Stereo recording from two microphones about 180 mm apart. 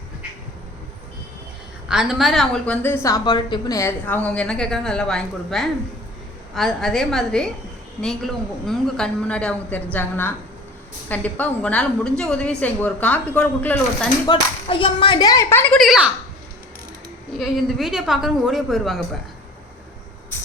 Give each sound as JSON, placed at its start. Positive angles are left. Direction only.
{"t": 1.9, "sound": "a woman's voice", "side_deg": -5}
{"t": 14.3, "sound": "speech", "side_deg": 30}
{"t": 17.3, "sound": "a woman's voice", "side_deg": 0}